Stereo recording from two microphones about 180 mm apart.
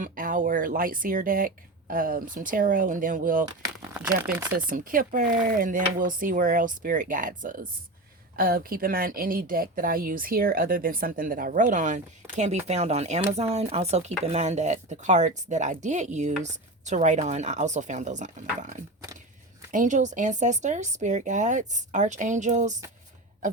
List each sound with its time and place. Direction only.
0.0 s speech: 50° right (ahead or behind)
3.9 s speech: 10° right (ahead or behind)
4.5 s speech: 50° right (ahead or behind)